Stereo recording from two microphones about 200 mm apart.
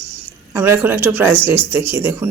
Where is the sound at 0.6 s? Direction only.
10° right (ahead or behind).